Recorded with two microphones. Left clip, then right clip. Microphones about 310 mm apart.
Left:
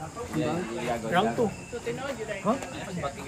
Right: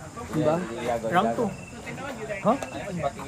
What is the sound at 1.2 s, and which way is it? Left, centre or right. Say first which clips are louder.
Speech: right 2 dB; centre.